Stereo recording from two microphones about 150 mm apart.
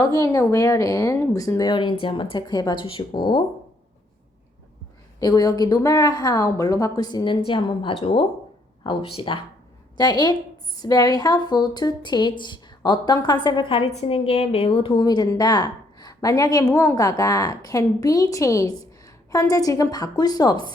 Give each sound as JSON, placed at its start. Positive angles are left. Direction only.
{"t": 0.0, "sound": "a woman's voice", "side_deg": 25}
{"t": 5.2, "sound": "a woman's voice", "side_deg": 25}